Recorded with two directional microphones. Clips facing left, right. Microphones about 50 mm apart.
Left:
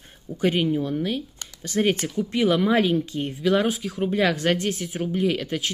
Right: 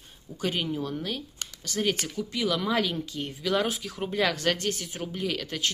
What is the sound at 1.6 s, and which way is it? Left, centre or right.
Speech, left.